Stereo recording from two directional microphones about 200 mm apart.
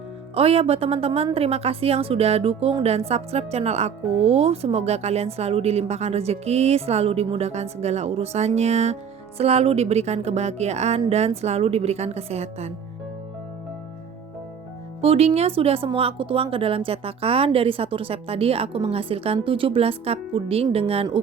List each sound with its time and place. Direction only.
0.3 s a woman's voice: 30° right (ahead or behind)
15.0 s speech: 30° right (ahead or behind)